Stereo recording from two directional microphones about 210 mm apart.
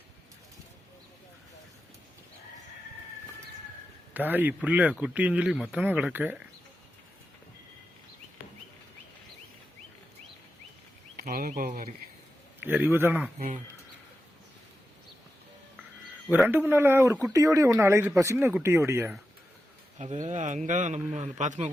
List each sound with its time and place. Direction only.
4.1 s speech: 10° right (ahead or behind)
11.2 s a man's voice: 45° right (ahead or behind)
12.5 s speech: 10° right (ahead or behind)
16.3 s speech: 10° right (ahead or behind)
20.0 s a man's voice: 35° right (ahead or behind)